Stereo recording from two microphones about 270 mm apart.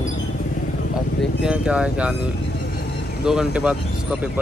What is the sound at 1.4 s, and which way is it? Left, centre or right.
Speech, centre.